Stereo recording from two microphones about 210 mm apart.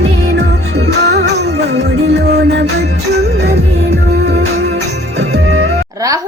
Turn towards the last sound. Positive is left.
turn(degrees=-15)  # may be behind; listen again after turning